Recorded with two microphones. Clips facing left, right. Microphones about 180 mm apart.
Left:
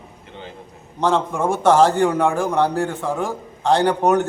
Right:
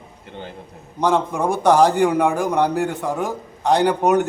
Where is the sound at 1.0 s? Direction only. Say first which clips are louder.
Even; 15° right (ahead or behind).